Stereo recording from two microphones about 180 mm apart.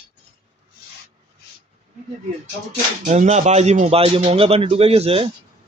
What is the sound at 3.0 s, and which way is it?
A man's voice, 40° right (ahead or behind).